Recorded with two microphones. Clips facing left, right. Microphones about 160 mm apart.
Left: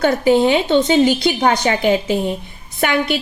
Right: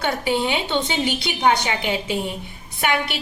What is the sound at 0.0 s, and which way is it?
A woman's voice, 45° left (ahead or behind).